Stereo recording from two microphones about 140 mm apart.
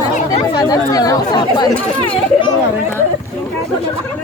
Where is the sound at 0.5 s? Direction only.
25° left (ahead or behind).